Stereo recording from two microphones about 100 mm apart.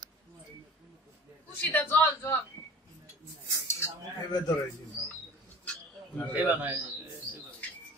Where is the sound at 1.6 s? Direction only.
20° left (ahead or behind).